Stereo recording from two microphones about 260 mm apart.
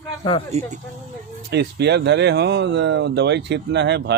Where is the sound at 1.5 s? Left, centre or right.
Right.